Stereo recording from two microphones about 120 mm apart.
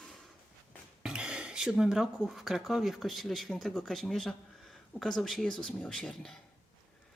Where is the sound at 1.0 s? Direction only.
10° right (ahead or behind).